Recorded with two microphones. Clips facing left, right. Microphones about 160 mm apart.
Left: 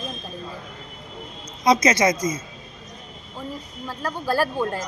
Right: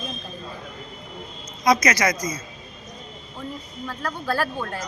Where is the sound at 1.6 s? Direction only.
25° left (ahead or behind).